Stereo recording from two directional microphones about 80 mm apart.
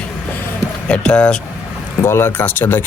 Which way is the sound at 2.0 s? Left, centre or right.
Left.